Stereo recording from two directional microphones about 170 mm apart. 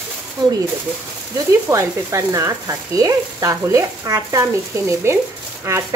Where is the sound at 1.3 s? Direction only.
20° right (ahead or behind).